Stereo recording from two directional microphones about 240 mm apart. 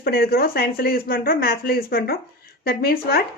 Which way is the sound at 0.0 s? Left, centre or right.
Left.